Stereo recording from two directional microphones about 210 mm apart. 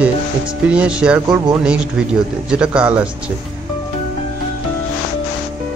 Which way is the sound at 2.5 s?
5° right (ahead or behind).